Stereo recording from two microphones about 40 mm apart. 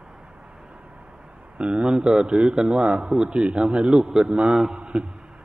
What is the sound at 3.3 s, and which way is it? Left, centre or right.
Speech, right.